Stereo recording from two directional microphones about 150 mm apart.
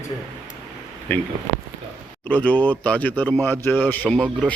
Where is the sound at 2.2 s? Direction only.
10° left (ahead or behind).